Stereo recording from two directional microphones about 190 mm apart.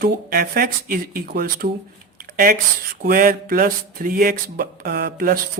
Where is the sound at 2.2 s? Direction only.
50° right (ahead or behind).